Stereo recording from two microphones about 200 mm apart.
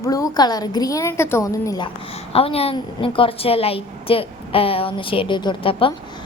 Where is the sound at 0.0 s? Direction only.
15° left (ahead or behind).